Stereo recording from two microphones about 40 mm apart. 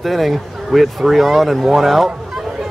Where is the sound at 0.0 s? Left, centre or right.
Centre.